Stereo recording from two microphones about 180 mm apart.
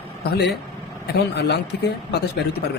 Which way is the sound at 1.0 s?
65° left (ahead or behind).